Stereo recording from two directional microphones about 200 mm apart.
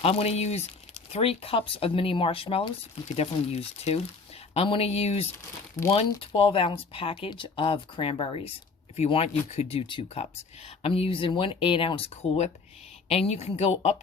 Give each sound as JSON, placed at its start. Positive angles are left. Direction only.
{"t": 0.0, "sound": "a woman's voice", "side_deg": 30}